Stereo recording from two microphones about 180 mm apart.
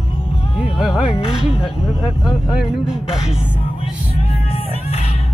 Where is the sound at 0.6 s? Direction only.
5° right (ahead or behind).